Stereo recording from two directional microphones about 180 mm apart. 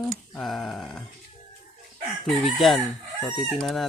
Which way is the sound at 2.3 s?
Centre (ahead or behind).